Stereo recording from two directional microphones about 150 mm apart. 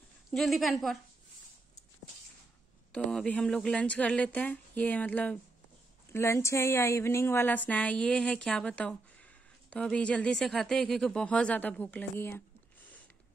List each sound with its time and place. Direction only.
0.3 s a woman's voice: centre (ahead or behind)
2.9 s speech: 5° left (ahead or behind)